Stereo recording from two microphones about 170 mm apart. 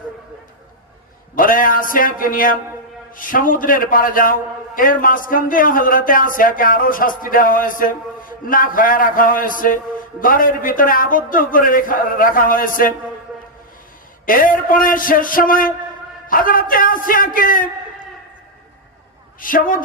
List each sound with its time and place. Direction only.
1.4 s a man's voice: 55° left (ahead or behind)
14.3 s a man's voice: 55° left (ahead or behind)
19.4 s a man's voice: 55° left (ahead or behind)